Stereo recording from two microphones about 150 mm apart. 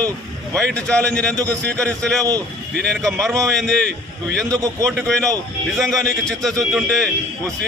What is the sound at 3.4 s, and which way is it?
A man's voice, 5° left (ahead or behind).